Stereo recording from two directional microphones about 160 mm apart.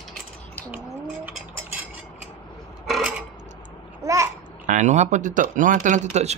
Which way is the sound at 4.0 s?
20° right (ahead or behind).